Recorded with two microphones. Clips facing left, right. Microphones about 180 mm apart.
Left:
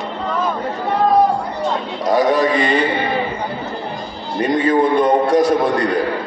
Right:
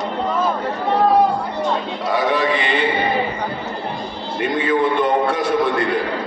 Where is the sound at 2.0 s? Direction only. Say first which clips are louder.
Left 6 dB; 40° left (ahead or behind).